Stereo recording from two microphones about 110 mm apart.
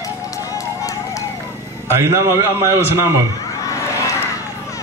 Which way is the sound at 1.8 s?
25° right (ahead or behind).